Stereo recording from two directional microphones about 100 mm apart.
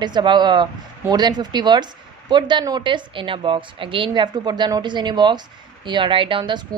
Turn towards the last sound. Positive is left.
turn(degrees=-50)  # may be behind; listen again after turning